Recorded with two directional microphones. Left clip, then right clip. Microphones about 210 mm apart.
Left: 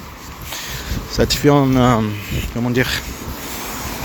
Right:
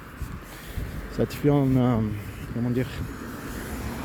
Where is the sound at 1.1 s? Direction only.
5° left (ahead or behind).